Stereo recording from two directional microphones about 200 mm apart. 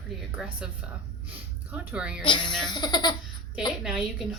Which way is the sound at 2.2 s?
25° left (ahead or behind).